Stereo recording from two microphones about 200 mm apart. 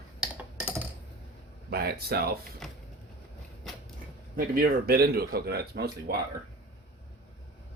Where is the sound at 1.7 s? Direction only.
50° right (ahead or behind).